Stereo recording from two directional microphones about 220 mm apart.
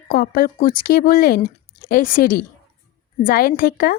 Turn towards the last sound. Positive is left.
turn(degrees=40)  # may be behind; listen again after turning